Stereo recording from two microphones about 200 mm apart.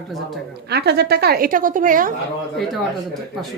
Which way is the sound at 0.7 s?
55° right (ahead or behind).